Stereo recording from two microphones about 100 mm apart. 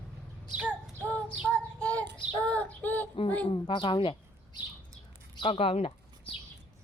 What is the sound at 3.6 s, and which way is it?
Speech, 55° left (ahead or behind).